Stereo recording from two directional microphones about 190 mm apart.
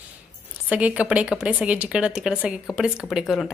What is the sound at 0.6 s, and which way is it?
Speech, 5° right (ahead or behind).